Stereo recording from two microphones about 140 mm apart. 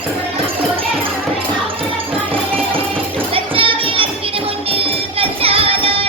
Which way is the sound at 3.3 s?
40° right (ahead or behind).